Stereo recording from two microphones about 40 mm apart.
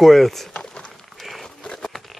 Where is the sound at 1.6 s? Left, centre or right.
Centre.